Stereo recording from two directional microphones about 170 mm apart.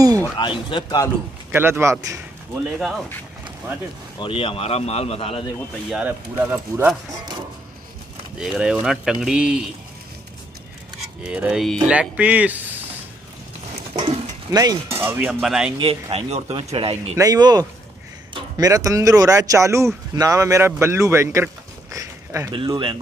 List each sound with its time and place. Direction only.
0.4 s speech: 30° left (ahead or behind)
1.5 s speech: 15° right (ahead or behind)
4.2 s a man's voice: 30° left (ahead or behind)
5.9 s speech: 10° right (ahead or behind)
8.4 s speech: 5° right (ahead or behind)
11.2 s speech: 5° right (ahead or behind)
13.9 s speech: 25° right (ahead or behind); by 15.7 s 5° right (ahead or behind)
15.8 s a man's voice: 35° right (ahead or behind); by 21.5 s 15° right (ahead or behind)
21.9 s a sound: 15° right (ahead or behind)
22.5 s a man's voice: 30° right (ahead or behind)